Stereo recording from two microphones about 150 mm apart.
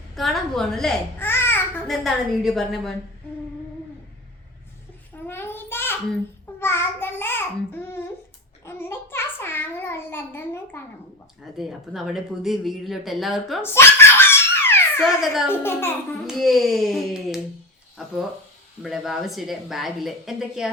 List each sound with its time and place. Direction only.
0.2 s speech: centre (ahead or behind)
1.2 s babbling: 15° left (ahead or behind)
1.9 s speech: centre (ahead or behind)
5.1 s a sound: 15° left (ahead or behind)
6.6 s babbling: 15° left (ahead or behind)
8.6 s a sound: 15° left (ahead or behind)
11.5 s speech: centre (ahead or behind)
13.6 s giggle: 15° left (ahead or behind)
15.4 s a child's voice: 15° left (ahead or behind)
16.2 s speech: centre (ahead or behind)